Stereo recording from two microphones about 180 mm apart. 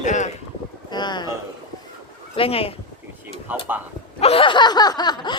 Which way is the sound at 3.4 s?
10° right (ahead or behind).